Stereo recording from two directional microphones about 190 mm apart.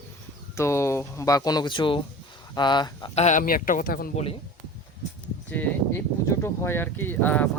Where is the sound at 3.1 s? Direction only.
40° left (ahead or behind).